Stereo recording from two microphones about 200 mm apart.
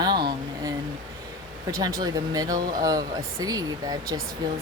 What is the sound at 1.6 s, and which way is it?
Speech, 15° right (ahead or behind).